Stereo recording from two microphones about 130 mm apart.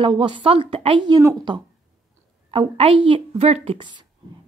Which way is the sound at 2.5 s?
40° right (ahead or behind).